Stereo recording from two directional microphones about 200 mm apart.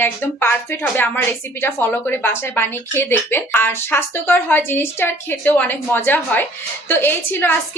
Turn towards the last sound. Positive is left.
turn(degrees=10)  # may be behind; listen again after turning